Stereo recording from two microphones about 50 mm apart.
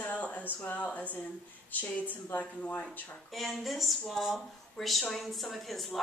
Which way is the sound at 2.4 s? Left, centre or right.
Left.